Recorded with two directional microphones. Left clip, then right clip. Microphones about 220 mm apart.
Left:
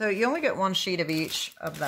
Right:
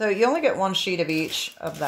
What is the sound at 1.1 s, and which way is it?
Speech, 50° left (ahead or behind).